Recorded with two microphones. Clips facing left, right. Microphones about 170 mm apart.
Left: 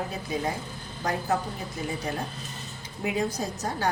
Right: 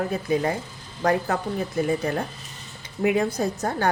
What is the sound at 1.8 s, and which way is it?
Speech, 55° right (ahead or behind).